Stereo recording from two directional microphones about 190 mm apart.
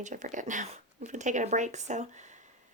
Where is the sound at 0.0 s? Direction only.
40° right (ahead or behind).